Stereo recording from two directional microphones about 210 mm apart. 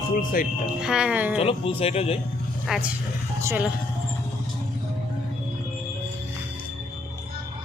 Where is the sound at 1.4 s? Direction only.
25° left (ahead or behind).